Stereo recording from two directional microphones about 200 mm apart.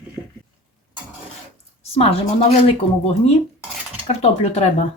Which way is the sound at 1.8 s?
30° left (ahead or behind).